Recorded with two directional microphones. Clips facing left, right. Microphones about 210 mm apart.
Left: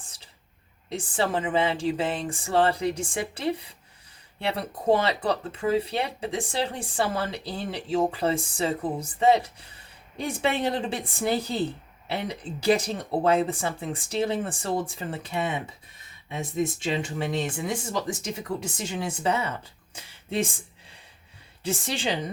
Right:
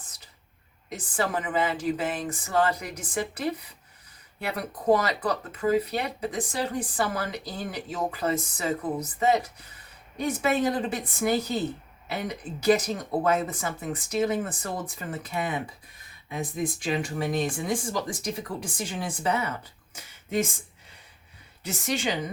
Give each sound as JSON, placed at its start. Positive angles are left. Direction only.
{"t": 0.9, "sound": "speech", "side_deg": 30}
{"t": 21.6, "sound": "a woman's voice", "side_deg": 30}